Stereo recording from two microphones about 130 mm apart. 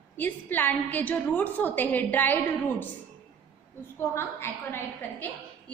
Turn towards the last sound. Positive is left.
turn(degrees=20)  # may be behind; listen again after turning